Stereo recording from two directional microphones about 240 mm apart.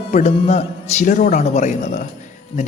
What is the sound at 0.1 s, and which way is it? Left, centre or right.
A man's voice, left.